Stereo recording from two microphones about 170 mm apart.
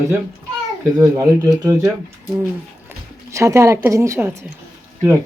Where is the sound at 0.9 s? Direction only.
20° right (ahead or behind).